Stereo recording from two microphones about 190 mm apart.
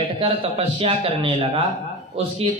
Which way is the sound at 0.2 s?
25° right (ahead or behind).